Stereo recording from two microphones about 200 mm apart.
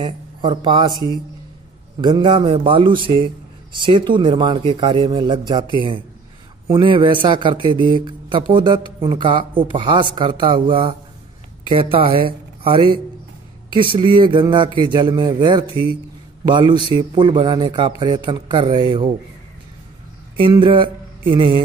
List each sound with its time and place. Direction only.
0.0 s speech: 25° right (ahead or behind)
20.3 s speech: 25° right (ahead or behind)